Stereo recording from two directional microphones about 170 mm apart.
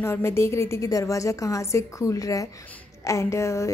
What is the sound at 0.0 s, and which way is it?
A woman's voice, 15° left (ahead or behind).